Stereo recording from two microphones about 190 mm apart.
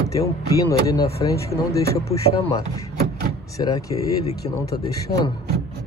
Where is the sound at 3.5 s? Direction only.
20° left (ahead or behind).